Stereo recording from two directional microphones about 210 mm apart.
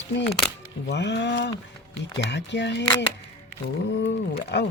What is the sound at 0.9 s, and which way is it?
Speech, 55° left (ahead or behind).